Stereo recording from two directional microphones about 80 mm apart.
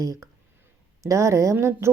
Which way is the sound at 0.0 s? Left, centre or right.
Right.